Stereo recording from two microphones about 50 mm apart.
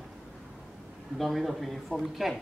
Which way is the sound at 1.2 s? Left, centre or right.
Centre.